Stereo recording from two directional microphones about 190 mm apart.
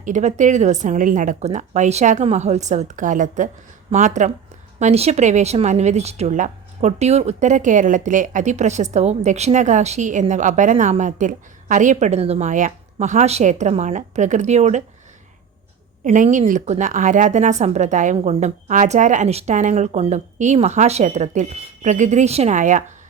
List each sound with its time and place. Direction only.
0.0 s speech: 40° right (ahead or behind)
16.0 s speech: 40° right (ahead or behind)